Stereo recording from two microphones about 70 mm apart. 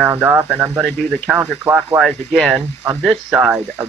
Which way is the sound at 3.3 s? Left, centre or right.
Right.